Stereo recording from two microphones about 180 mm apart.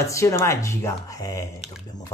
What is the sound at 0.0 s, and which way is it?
A man's voice, 15° left (ahead or behind).